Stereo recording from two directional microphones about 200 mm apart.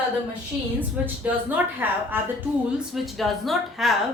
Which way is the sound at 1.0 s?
10° right (ahead or behind).